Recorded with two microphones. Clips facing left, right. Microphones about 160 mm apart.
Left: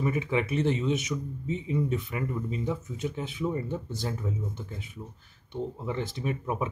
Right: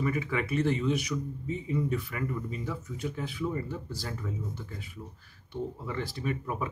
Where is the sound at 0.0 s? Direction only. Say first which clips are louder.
Left 2 dB; 20° left (ahead or behind).